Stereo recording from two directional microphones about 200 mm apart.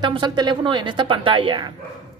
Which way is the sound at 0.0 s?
20° right (ahead or behind).